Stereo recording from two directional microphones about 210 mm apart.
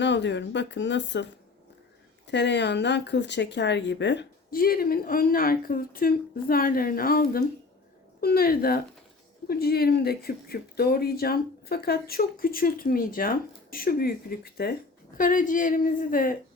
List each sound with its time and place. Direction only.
0.0 s a woman's voice: 55° left (ahead or behind); by 16.4 s 40° left (ahead or behind)